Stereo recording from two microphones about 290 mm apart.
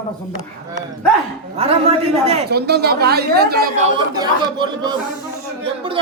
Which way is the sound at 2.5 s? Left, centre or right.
Right.